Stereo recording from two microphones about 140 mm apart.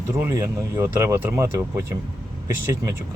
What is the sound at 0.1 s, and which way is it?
Speech, 20° right (ahead or behind).